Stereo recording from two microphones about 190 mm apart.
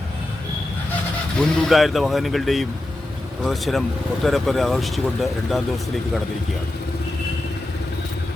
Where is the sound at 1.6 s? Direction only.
Centre (ahead or behind).